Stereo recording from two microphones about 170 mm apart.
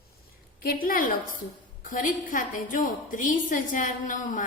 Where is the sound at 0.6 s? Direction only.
55° left (ahead or behind).